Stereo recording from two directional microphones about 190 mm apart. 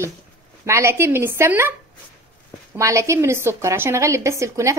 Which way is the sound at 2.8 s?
15° right (ahead or behind).